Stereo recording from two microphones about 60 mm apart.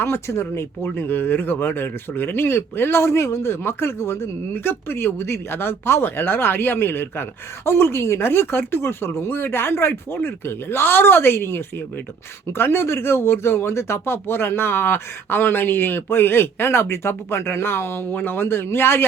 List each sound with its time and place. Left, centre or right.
0.0 s speech: left
0.9 s speech: left